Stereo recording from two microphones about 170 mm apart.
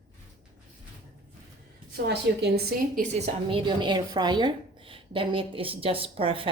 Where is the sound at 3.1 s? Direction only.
35° right (ahead or behind).